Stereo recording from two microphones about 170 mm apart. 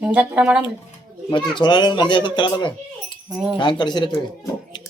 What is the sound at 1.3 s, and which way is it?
Speech, 30° left (ahead or behind).